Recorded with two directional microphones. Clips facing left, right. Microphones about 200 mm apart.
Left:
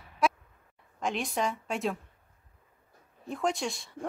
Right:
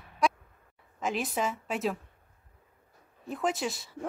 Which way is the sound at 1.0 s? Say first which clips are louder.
Even; 5° right (ahead or behind).